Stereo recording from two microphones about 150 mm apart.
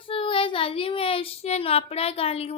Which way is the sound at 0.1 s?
35° left (ahead or behind).